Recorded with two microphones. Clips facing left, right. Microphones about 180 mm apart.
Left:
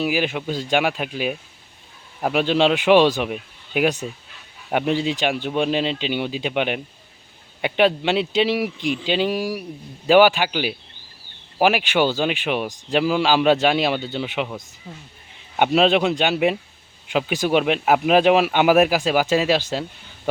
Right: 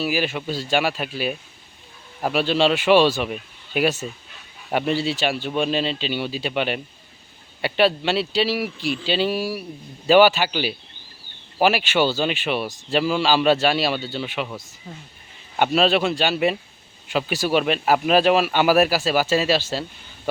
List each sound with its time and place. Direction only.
0.0 s speech: 15° left (ahead or behind)
15.7 s speech: 20° left (ahead or behind)
18.2 s speech: 15° left (ahead or behind)